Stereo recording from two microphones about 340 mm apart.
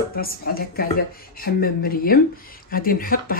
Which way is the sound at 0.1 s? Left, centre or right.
Left.